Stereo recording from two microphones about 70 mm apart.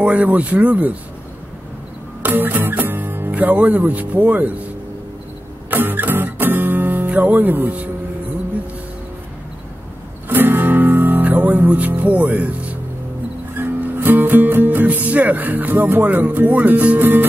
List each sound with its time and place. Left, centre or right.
0.0 s speech: right
2.2 s music: right
5.7 s music: right
10.2 s music: right
13.6 s speech: right